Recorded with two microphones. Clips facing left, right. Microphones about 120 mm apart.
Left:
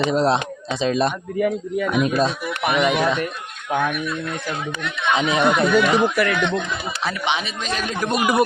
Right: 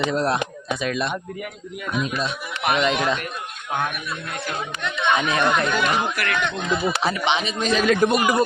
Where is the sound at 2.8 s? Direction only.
5° left (ahead or behind).